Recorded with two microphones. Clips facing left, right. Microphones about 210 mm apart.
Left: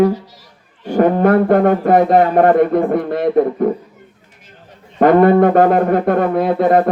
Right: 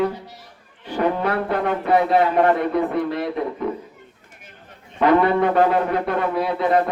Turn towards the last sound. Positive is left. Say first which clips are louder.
# left 6 dB
turn(degrees=50)  # may be behind; listen again after turning